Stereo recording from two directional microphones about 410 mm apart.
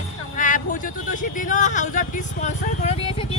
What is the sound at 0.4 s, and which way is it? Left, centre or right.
Vehicle, centre.